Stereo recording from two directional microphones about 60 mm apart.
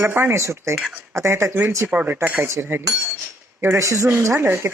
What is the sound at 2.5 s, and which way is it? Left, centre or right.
Speech, right.